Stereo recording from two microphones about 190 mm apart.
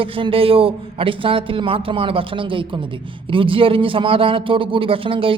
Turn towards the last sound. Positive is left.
turn(degrees=-30)  # may be behind; listen again after turning